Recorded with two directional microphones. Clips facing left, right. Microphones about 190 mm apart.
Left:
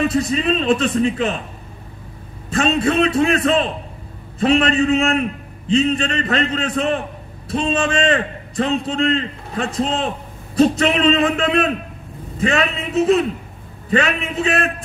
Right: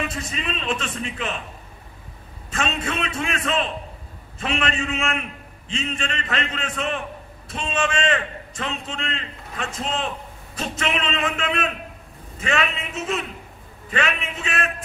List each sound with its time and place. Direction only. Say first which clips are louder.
0.0 s a man's voice: left 11 dB; 35° left (ahead or behind)
2.5 s a man's voice: left 10 dB; 40° left (ahead or behind)